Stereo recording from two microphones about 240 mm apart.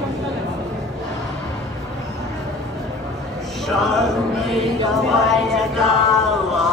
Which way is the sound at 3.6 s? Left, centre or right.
Centre.